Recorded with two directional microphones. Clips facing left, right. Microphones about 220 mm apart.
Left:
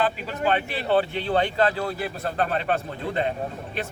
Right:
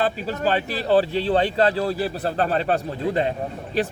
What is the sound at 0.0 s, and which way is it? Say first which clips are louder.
Speech: right 2 dB; 40° right (ahead or behind).